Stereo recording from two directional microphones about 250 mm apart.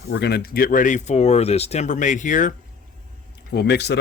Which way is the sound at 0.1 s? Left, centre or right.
Left.